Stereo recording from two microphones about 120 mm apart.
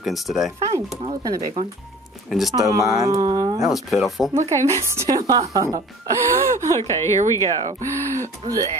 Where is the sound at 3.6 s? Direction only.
Centre (ahead or behind).